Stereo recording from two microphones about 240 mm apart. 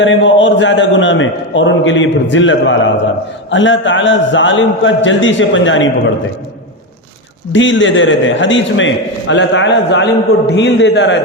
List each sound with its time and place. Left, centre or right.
0.0 s a man's voice: left
7.5 s a man's voice: left